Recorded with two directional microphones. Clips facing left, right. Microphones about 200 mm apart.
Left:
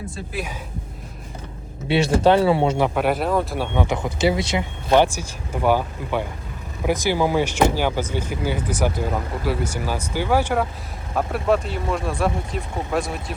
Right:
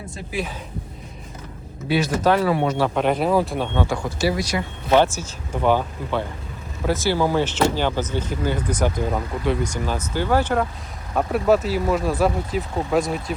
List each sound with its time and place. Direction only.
1.9 s speech: 25° left (ahead or behind)
2.9 s speech: 5° left (ahead or behind)
3.8 s speech: 20° left (ahead or behind); by 13.3 s centre (ahead or behind)